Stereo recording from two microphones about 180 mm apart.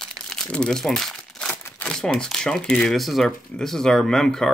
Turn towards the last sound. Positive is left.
turn(degrees=5)  # may be behind; listen again after turning